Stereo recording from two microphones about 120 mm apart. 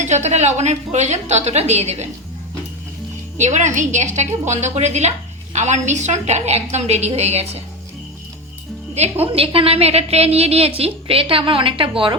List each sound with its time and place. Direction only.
0.0 s a woman's voice: 70° right (ahead or behind)
3.3 s a woman's voice: 80° right; by 7.6 s 65° right (ahead or behind)
9.2 s a woman's voice: 55° right (ahead or behind)